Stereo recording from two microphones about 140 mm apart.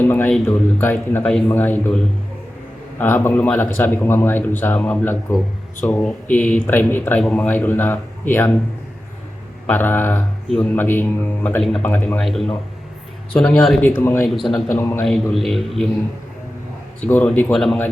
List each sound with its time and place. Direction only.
0.0 s a sound: 15° left (ahead or behind)
0.4 s speech: 15° left (ahead or behind)
3.0 s speech: 15° left (ahead or behind)
9.6 s a man's voice: 15° left (ahead or behind)
13.8 s speech: 15° left (ahead or behind)
14.3 s a man's voice: centre (ahead or behind)
14.7 s a man's voice: 20° left (ahead or behind)
15.0 s a man's voice: centre (ahead or behind)
17.0 s speech: 15° left (ahead or behind)
17.5 s a man's voice: 5° left (ahead or behind)